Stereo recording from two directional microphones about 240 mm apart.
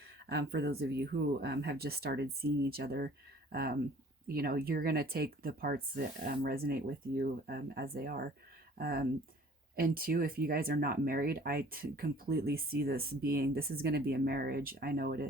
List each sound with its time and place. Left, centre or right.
0.3 s speech: right